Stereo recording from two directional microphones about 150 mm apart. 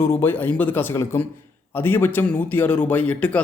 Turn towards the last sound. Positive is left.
turn(degrees=10)  # may be behind; listen again after turning